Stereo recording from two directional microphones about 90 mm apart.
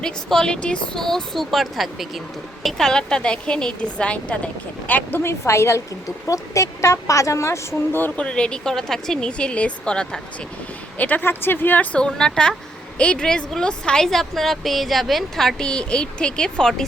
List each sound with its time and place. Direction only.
0.0 s a woman's voice: 5° left (ahead or behind); by 7.6 s 35° left (ahead or behind)
7.9 s a woman's voice: 20° left (ahead or behind)